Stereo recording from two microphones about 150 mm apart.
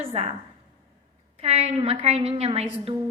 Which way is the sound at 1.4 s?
45° right (ahead or behind).